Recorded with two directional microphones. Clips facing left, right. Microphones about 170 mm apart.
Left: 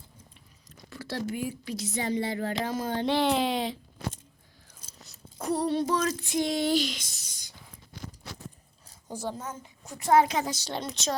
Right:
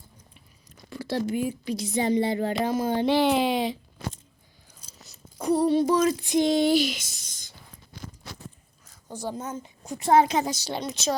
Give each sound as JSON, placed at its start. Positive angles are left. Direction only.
{"t": 0.9, "sound": "a woman's voice", "side_deg": -15}
{"t": 4.9, "sound": "a sound", "side_deg": 0}
{"t": 5.8, "sound": "a woman's voice", "side_deg": -15}
{"t": 6.7, "sound": "speech", "side_deg": -10}
{"t": 7.3, "sound": "a sound", "side_deg": 10}
{"t": 9.4, "sound": "a woman's voice", "side_deg": -20}
{"t": 10.5, "sound": "speech", "side_deg": -10}